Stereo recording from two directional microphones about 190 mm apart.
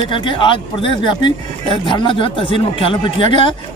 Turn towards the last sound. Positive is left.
turn(degrees=25)  # may be behind; listen again after turning